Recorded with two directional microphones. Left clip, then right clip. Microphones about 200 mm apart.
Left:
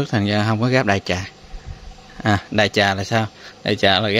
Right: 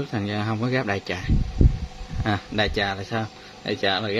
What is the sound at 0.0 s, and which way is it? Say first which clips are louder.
A man's voice: left 8 dB; 35° left (ahead or behind).